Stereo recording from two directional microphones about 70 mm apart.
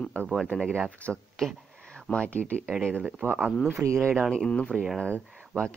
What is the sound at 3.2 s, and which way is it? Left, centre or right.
Speech, right.